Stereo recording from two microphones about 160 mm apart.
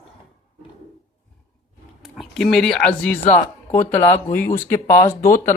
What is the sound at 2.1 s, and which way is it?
Speech, centre (ahead or behind).